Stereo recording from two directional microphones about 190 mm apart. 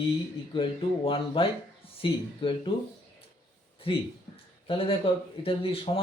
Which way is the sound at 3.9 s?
30° left (ahead or behind).